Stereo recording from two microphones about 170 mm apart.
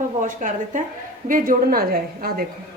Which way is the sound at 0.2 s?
50° right (ahead or behind).